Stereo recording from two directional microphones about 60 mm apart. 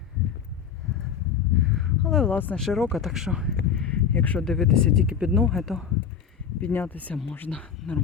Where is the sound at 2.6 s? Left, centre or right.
Centre.